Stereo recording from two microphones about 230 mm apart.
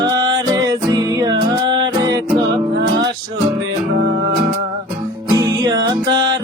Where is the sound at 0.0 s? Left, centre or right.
Centre.